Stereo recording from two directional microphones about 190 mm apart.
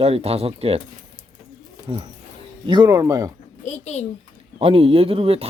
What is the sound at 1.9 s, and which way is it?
Speech, 25° right (ahead or behind).